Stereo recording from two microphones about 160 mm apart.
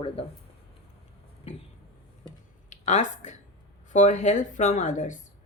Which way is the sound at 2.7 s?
50° left (ahead or behind).